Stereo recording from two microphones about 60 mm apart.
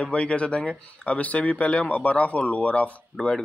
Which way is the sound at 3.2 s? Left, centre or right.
Centre.